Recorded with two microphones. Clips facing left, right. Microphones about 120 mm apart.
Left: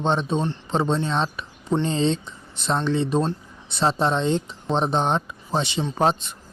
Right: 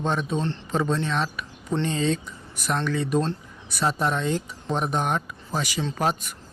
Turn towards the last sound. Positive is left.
turn(degrees=25)  # may be behind; listen again after turning